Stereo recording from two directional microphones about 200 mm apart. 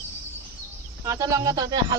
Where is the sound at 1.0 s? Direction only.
15° right (ahead or behind).